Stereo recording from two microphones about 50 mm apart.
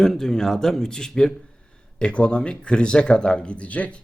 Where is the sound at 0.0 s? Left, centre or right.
Centre.